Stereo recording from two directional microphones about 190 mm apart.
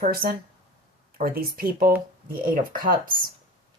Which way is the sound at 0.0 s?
50° right (ahead or behind).